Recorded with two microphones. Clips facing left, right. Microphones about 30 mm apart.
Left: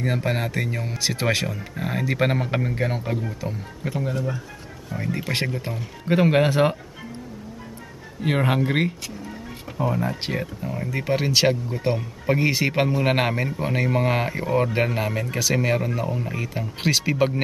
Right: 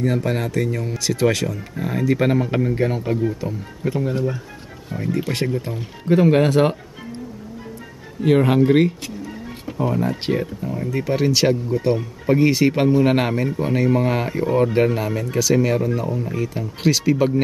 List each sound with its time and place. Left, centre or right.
0.0 s speech: centre
8.2 s speech: centre